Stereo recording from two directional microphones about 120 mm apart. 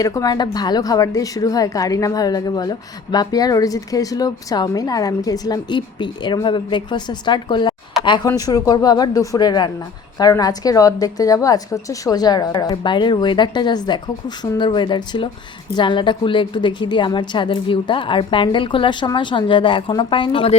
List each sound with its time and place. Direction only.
0.0 s a woman's voice: 30° left (ahead or behind)
8.3 s a woman's voice: 30° left (ahead or behind)